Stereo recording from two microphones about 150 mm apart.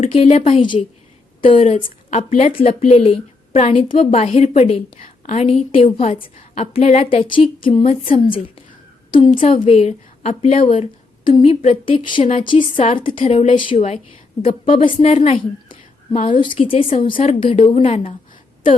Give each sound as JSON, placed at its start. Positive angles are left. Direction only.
{"t": 0.1, "sound": "speech", "side_deg": 45}
{"t": 0.6, "sound": "a woman's voice", "side_deg": 30}